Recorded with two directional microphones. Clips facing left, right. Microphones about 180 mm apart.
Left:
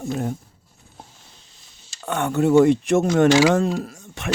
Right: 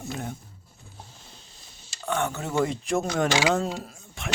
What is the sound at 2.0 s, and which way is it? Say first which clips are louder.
Speech: left 9 dB; 60° left (ahead or behind).